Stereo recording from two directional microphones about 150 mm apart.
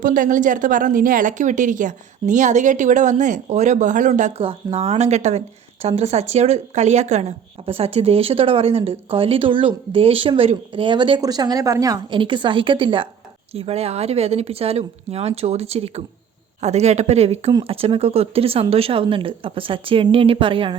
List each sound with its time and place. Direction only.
0.0 s a woman's voice: 60° right (ahead or behind)
4.4 s speech: 40° right (ahead or behind)